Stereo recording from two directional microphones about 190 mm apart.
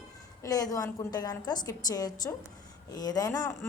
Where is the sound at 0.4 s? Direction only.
20° left (ahead or behind).